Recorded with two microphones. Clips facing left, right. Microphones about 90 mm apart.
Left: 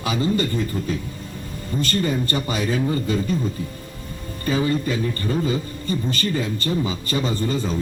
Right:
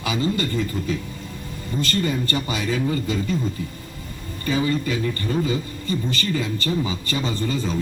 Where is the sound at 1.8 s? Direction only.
35° left (ahead or behind).